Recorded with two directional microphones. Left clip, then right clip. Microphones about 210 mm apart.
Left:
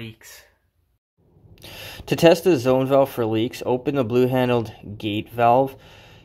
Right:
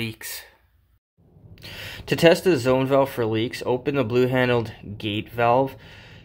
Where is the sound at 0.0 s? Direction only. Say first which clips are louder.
Right 8 dB; 40° right (ahead or behind).